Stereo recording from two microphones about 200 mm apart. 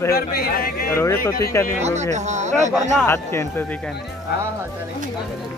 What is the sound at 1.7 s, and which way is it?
Speech, 35° right (ahead or behind).